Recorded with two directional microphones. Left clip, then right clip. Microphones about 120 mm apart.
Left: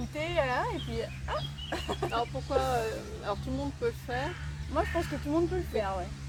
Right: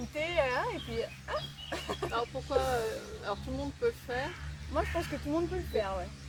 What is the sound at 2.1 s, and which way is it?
Speech, 25° left (ahead or behind).